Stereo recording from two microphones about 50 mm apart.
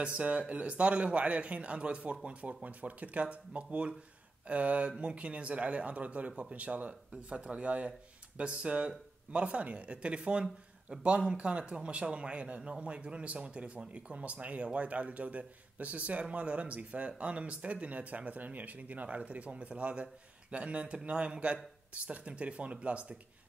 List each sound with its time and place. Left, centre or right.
0.0 s speech: right